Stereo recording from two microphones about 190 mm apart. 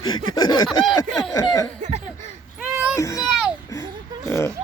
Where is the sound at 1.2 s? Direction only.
20° left (ahead or behind).